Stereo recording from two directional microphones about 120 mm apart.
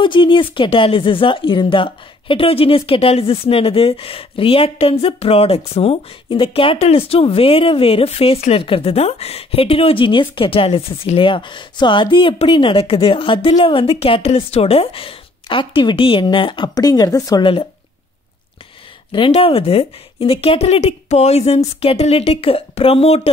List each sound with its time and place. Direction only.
0.0 s speech: 45° left (ahead or behind)
19.3 s speech: 55° left (ahead or behind)